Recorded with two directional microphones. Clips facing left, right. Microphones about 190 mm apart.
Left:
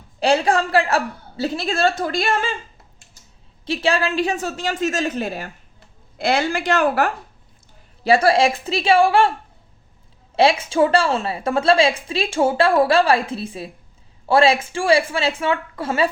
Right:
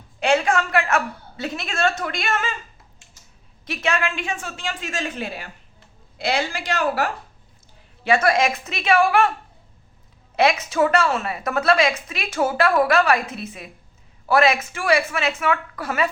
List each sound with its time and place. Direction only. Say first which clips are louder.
0.2 s a woman's voice: left 2 dB; 35° left (ahead or behind)
3.7 s a woman's voice: left 4 dB; 30° left (ahead or behind); by 7.1 s 55° left (ahead or behind)
8.0 s a woman's voice: left 3 dB; 35° left (ahead or behind)
10.3 s a woman's voice: left 3 dB; 30° left (ahead or behind)